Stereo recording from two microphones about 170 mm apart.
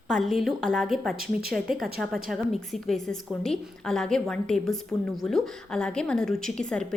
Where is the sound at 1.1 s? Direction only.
60° right (ahead or behind).